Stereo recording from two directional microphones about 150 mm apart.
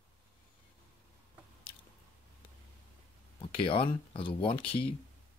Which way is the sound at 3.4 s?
35° left (ahead or behind).